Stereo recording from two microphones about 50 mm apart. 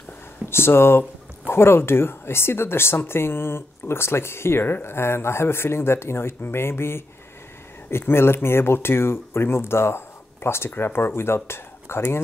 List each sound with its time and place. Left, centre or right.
0.5 s speech: left